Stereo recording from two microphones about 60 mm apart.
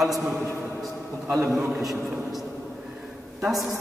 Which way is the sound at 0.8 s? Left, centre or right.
Centre.